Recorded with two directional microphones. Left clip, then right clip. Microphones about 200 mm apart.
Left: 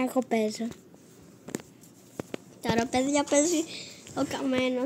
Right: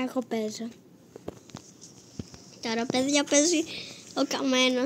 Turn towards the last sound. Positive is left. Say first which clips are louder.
# right 3 dB
turn(degrees=-15)  # may be behind; listen again after turning